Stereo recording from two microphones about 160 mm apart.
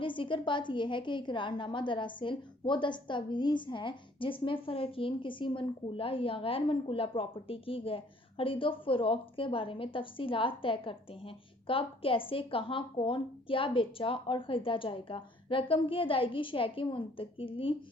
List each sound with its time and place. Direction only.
0.0 s a woman's voice: 30° left (ahead or behind)